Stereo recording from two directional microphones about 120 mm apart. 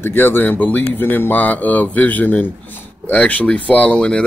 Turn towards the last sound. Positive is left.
turn(degrees=10)  # may be behind; listen again after turning